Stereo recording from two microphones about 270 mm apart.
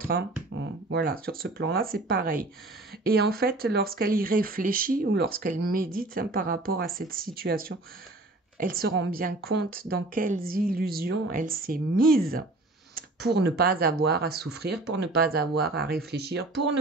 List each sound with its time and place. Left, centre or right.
0.5 s speech: right